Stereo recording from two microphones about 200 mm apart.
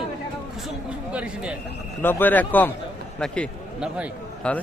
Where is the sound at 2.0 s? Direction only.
10° left (ahead or behind).